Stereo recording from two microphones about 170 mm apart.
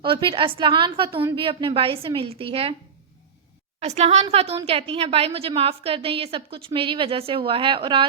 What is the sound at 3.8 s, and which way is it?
A woman's voice, 40° right (ahead or behind).